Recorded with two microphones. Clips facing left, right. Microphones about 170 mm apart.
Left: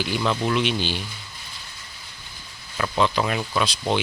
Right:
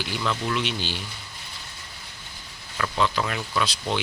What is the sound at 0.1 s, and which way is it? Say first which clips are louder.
Speech: left 3 dB; 20° left (ahead or behind).